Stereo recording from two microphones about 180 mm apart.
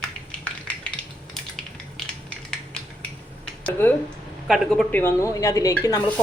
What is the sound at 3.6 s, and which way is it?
Speech, 10° left (ahead or behind).